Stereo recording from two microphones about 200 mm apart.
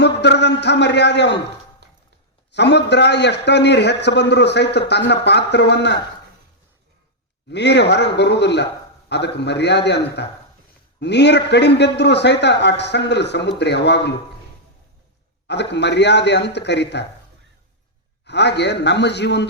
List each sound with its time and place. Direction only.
0.0 s a man's voice: 60° left (ahead or behind)
2.5 s a man's voice: 60° left (ahead or behind)
7.5 s a man's voice: 60° left (ahead or behind)
15.4 s a man's voice: 60° left (ahead or behind)
18.3 s a man's voice: 60° left (ahead or behind)